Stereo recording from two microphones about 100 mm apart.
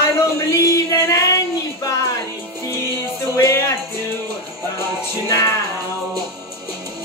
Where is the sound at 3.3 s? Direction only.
25° left (ahead or behind).